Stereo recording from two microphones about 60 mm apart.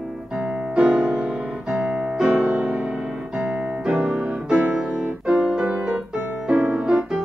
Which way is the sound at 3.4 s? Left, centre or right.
Centre.